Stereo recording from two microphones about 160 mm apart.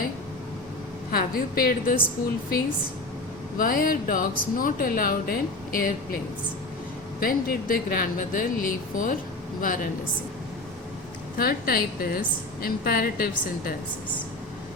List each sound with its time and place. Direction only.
1.1 s speech: 65° left (ahead or behind)
3.6 s speech: 65° left (ahead or behind)
7.2 s speech: 65° left (ahead or behind)
11.3 s a woman's voice: 65° left (ahead or behind)